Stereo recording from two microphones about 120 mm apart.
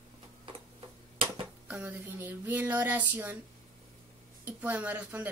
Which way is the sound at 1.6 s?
15° right (ahead or behind).